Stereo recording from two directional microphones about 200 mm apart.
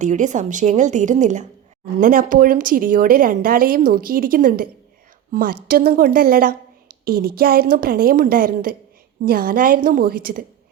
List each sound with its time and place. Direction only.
0.0 s a woman's voice: 40° right (ahead or behind)